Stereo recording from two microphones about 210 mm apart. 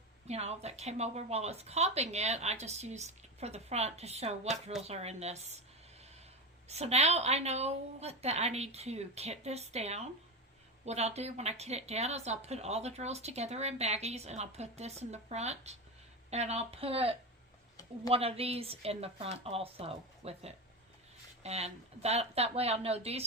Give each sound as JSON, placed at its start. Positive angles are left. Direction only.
{"t": 0.3, "sound": "speech", "side_deg": -30}
{"t": 6.7, "sound": "a woman's voice", "side_deg": -30}